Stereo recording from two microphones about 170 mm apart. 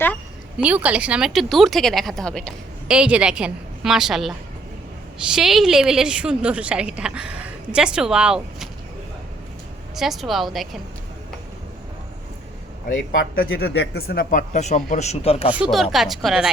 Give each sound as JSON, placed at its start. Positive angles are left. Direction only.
{"t": 0.6, "sound": "a woman's voice", "side_deg": -10}
{"t": 2.8, "sound": "a woman's voice", "side_deg": -5}
{"t": 9.9, "sound": "a woman's voice", "side_deg": 0}
{"t": 12.9, "sound": "speech", "side_deg": 55}
{"t": 15.5, "sound": "a woman's voice", "side_deg": -5}